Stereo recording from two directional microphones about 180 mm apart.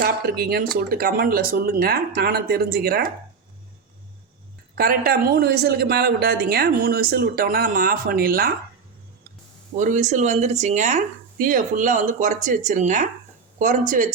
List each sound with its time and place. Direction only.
0.0 s speech: 60° right (ahead or behind)
4.7 s speech: 55° right (ahead or behind)
9.7 s speech: 45° right (ahead or behind)